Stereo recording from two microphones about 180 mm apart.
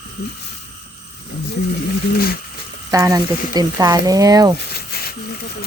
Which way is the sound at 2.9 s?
20° right (ahead or behind).